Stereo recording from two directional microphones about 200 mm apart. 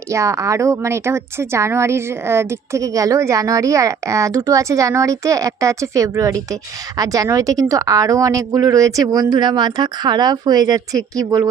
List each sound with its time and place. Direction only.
0.1 s speech: 15° right (ahead or behind)